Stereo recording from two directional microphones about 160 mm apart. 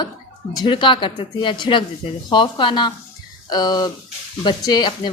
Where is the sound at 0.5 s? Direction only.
30° left (ahead or behind).